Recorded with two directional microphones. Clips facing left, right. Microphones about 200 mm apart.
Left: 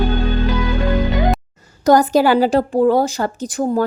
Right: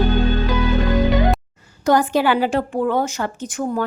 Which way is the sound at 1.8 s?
40° left (ahead or behind).